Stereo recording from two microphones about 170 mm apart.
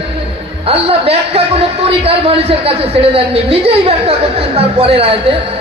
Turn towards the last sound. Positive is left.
turn(degrees=-35)  # may be behind; listen again after turning